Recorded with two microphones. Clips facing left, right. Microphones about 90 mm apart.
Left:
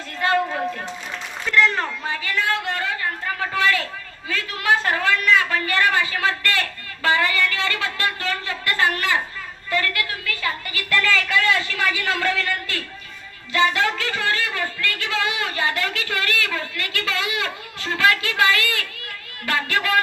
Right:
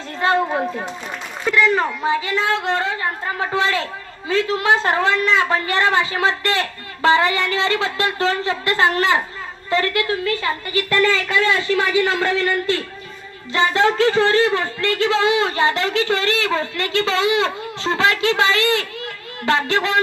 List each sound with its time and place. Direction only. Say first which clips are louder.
0.2 s a sound: right 3 dB; 25° right (ahead or behind)
1.5 s speech: right 3 dB; 10° right (ahead or behind)
2.0 s speech: right 4 dB; 20° right (ahead or behind)